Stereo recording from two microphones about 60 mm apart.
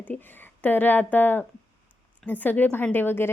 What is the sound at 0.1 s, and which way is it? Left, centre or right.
A woman's voice, left.